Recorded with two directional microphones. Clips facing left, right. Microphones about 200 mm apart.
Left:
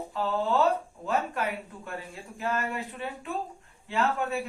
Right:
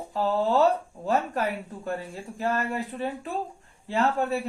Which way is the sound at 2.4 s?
35° right (ahead or behind).